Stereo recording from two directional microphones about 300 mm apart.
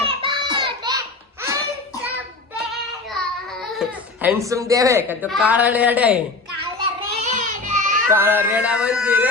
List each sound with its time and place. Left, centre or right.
0.0 s a sound: centre
3.1 s speech: centre
7.3 s child singing: right
8.1 s speech: centre